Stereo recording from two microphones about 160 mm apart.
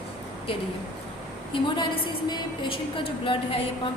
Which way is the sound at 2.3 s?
35° left (ahead or behind).